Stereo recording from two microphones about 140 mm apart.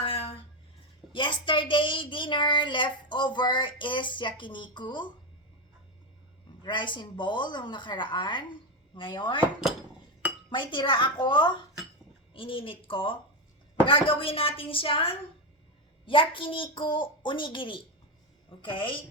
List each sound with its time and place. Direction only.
0.0 s a sound: 40° left (ahead or behind)
1.1 s a woman's voice: 35° left (ahead or behind)
6.6 s a woman's voice: 35° left (ahead or behind)
10.5 s a woman's voice: 35° left (ahead or behind)